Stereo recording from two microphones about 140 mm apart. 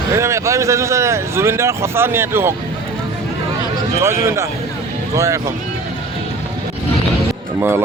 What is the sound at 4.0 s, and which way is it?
Speech, 20° right (ahead or behind).